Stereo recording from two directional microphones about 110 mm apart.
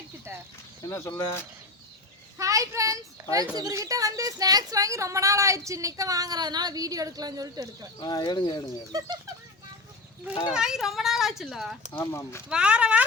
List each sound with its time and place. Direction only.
0.3 s speech: 25° right (ahead or behind)
0.9 s speech: 25° left (ahead or behind)
2.4 s a child's voice: 30° right (ahead or behind)
7.9 s speech: 40° left (ahead or behind)
8.9 s speech: 35° right (ahead or behind)
10.5 s a child's voice: 5° right (ahead or behind)
11.9 s speech: 25° left (ahead or behind)
12.5 s speech: 10° right (ahead or behind)